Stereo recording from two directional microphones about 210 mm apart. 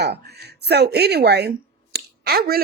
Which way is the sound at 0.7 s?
50° right (ahead or behind).